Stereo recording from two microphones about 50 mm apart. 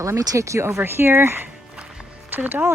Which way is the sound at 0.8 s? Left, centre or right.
Right.